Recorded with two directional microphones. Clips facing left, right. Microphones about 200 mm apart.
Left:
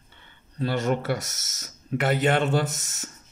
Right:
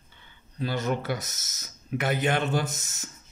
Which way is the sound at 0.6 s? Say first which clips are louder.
Left 3 dB; 75° left (ahead or behind).